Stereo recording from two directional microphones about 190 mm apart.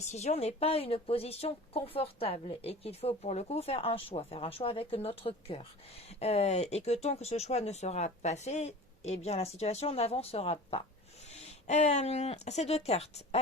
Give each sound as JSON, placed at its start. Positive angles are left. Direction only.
{"t": 0.0, "sound": "speech", "side_deg": 35}